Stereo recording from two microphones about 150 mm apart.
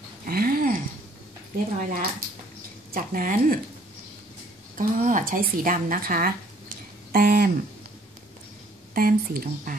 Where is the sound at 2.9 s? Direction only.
70° right (ahead or behind).